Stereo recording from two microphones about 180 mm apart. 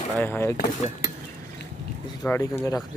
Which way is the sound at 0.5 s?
45° left (ahead or behind).